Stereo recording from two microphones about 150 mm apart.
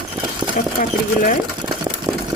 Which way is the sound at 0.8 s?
65° left (ahead or behind).